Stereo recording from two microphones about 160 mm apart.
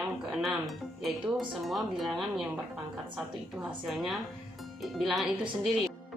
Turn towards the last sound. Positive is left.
turn(degrees=0)  # may be behind; listen again after turning